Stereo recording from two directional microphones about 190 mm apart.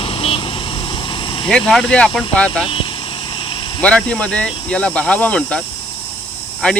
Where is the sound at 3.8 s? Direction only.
5° left (ahead or behind).